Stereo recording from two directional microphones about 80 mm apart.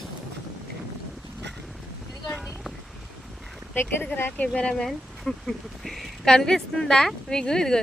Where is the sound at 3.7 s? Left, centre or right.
Left.